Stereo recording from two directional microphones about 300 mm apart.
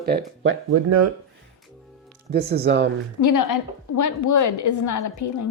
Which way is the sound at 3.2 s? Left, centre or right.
Left.